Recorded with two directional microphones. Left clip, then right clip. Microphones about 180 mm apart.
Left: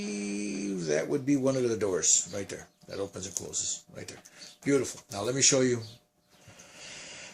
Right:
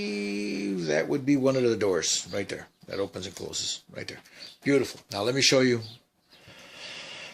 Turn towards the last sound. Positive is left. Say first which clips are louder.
# right 5 dB
turn(degrees=-30)  # may be behind; listen again after turning